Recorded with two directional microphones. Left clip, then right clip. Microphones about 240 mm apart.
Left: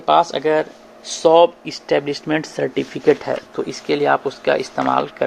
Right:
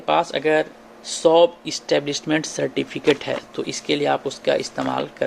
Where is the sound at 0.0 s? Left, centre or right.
Left; by 3.7 s centre.